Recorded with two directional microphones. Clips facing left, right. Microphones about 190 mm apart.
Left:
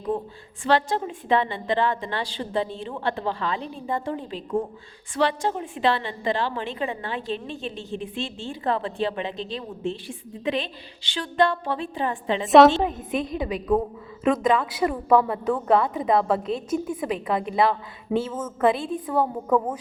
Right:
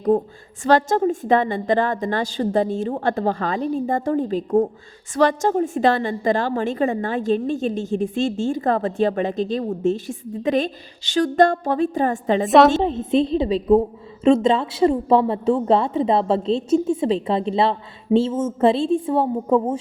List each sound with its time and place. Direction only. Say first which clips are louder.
0.6 s a woman's voice: right 6 dB; 45° right (ahead or behind)
12.5 s a woman's voice: even; centre (ahead or behind)
12.8 s a woman's voice: right 7 dB; 25° right (ahead or behind)